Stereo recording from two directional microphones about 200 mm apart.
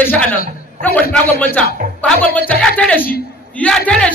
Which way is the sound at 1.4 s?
10° left (ahead or behind).